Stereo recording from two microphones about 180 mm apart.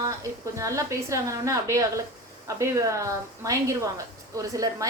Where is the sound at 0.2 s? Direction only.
15° right (ahead or behind).